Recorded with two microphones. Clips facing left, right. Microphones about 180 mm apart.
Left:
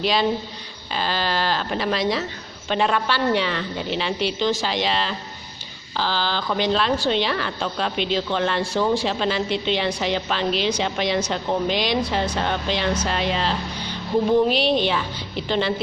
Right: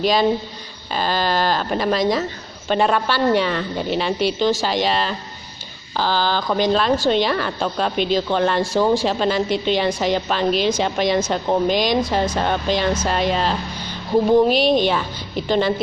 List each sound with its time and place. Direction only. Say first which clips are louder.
0.0 s a woman's voice: right 4 dB; 45° right (ahead or behind)